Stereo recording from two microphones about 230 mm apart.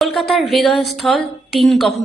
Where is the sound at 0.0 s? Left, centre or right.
Centre.